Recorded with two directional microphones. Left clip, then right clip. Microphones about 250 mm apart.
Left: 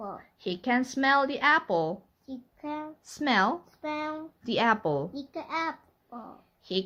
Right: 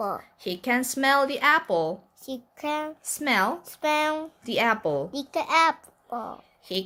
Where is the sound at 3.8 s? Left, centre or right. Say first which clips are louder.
Right 10 dB; right.